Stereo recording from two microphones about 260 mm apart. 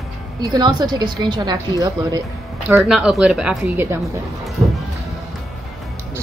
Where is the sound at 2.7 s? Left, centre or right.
Centre.